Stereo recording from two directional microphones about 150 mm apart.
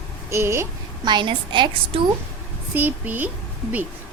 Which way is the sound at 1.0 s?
30° right (ahead or behind).